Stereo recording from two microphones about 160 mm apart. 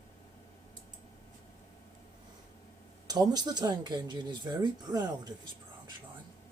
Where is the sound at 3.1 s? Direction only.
25° right (ahead or behind).